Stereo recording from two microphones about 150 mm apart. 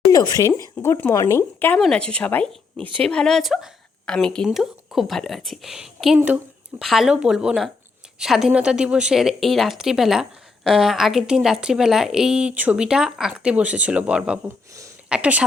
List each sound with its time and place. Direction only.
0.1 s a woman's voice: 25° left (ahead or behind); by 15.4 s 10° right (ahead or behind)